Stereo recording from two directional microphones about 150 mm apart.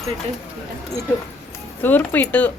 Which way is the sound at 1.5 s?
15° left (ahead or behind).